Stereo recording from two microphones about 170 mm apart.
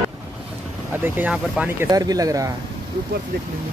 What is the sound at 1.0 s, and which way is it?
Speech, 10° right (ahead or behind).